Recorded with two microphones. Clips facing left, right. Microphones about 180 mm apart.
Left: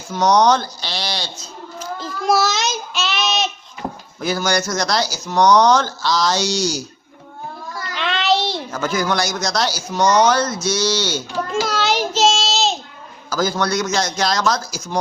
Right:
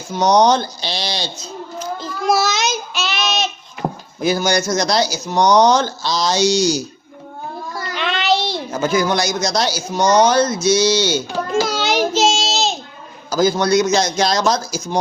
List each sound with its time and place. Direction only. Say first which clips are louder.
0.1 s a man's voice: right 1 dB; 15° right (ahead or behind)
2.0 s child singing: even; centre (ahead or behind)
4.2 s speech: right 3 dB; 15° right (ahead or behind)
7.7 s child singing: right 2 dB; 30° right (ahead or behind)
7.9 s child singing: even; centre (ahead or behind)
8.7 s speech: right 4 dB; 20° right (ahead or behind)
11.7 s child singing: right 2 dB; centre (ahead or behind)
13.3 s a man's voice: right 5 dB; 15° right (ahead or behind)